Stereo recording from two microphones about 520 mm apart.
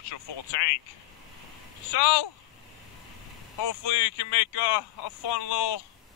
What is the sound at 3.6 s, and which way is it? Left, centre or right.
Speech, left.